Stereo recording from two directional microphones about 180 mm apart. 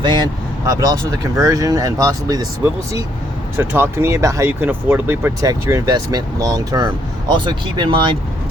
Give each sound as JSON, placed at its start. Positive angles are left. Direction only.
{"t": 0.0, "sound": "speech", "side_deg": -25}
{"t": 3.6, "sound": "speech", "side_deg": -10}